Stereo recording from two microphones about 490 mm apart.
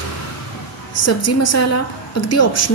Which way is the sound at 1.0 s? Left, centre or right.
Left.